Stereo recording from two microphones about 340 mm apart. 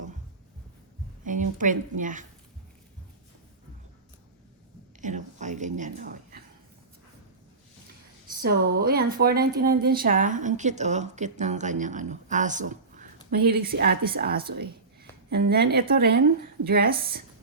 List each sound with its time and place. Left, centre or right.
1.2 s a woman's voice: right
4.9 s a sound: right
8.4 s a woman's voice: right